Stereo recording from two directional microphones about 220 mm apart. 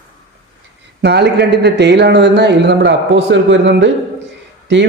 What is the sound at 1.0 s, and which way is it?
A man's voice, 50° right (ahead or behind).